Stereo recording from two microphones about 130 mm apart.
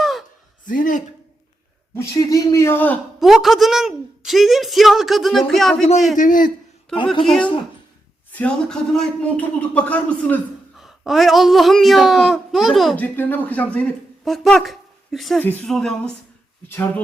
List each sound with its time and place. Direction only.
0.0 s a sound: centre (ahead or behind)
0.6 s speech: 90° left
2.0 s speech: 25° left (ahead or behind)
3.2 s a woman's voice: 5° right (ahead or behind)
6.1 s a man's voice: 90° left
7.3 s a man's voice: 5° left (ahead or behind)
10.8 s a woman's voice: centre (ahead or behind)
13.0 s a man's voice: 15° left (ahead or behind)
14.3 s a woman's voice: centre (ahead or behind)